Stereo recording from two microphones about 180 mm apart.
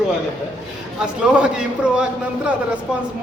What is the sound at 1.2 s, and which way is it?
A man's voice, 5° right (ahead or behind).